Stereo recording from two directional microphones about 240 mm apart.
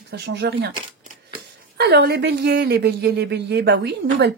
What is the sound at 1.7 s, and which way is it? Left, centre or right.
A woman's voice, right.